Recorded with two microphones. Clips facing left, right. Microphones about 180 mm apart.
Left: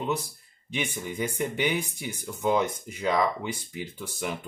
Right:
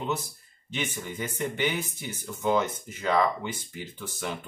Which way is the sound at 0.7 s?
10° left (ahead or behind).